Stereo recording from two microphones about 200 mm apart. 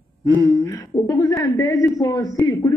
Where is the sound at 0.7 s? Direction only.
20° left (ahead or behind).